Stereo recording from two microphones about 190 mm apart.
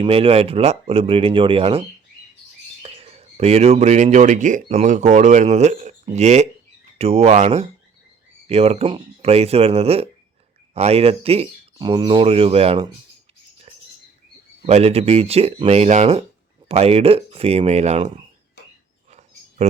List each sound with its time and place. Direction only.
0.0 s speech: 30° right (ahead or behind)
2.8 s speech: 30° right (ahead or behind)
14.7 s speech: 35° right (ahead or behind)